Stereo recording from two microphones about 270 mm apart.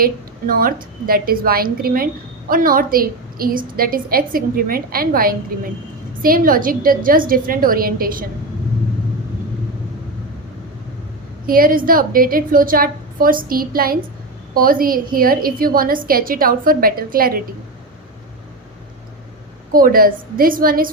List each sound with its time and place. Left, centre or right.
0.0 s a woman's voice: right
11.4 s a woman's voice: right
19.7 s a woman's voice: right